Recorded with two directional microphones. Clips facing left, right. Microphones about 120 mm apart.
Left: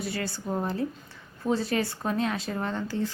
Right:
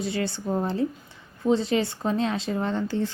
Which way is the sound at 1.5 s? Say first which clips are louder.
Right 4 dB; 25° right (ahead or behind).